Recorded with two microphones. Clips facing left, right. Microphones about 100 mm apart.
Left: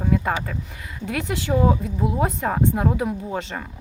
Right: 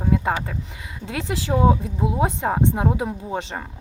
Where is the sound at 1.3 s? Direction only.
30° right (ahead or behind).